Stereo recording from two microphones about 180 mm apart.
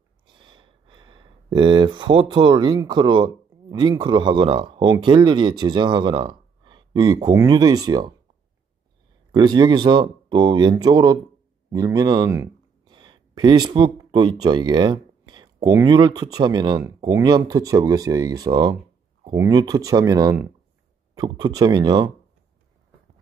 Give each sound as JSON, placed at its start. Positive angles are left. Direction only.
{"t": 0.3, "sound": "speech", "side_deg": -25}
{"t": 9.3, "sound": "speech", "side_deg": -25}